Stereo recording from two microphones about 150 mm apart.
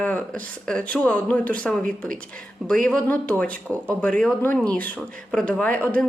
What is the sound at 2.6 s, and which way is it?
Speech, 5° left (ahead or behind).